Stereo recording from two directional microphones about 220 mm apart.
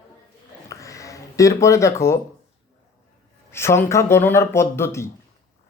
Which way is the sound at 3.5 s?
10° left (ahead or behind).